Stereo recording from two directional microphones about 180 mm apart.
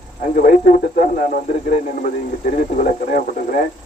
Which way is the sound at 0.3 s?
50° left (ahead or behind).